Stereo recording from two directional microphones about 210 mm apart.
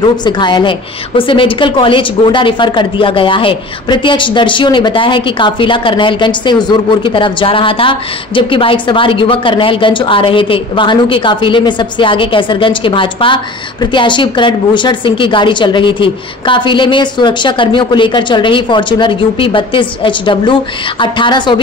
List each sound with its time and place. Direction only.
0.0 s a woman's voice: 20° left (ahead or behind)